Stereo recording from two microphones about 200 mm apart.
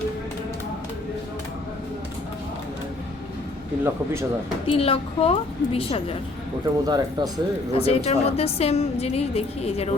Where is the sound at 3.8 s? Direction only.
15° right (ahead or behind).